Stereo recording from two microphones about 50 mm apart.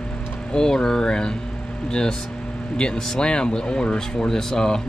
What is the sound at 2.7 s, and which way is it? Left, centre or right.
Speech, centre.